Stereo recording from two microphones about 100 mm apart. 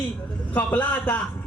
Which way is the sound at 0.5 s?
15° left (ahead or behind).